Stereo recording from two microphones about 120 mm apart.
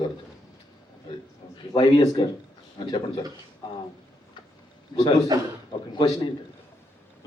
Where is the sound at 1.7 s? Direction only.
30° left (ahead or behind).